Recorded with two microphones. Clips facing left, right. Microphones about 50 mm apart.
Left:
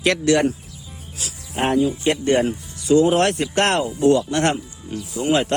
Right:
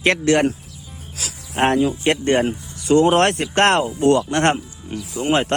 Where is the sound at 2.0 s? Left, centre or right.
Right.